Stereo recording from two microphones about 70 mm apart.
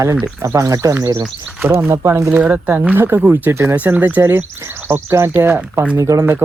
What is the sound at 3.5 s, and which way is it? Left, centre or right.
Speech, right.